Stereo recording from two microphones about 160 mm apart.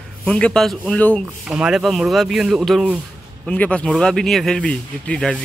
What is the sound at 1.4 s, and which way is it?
Speech, 5° right (ahead or behind).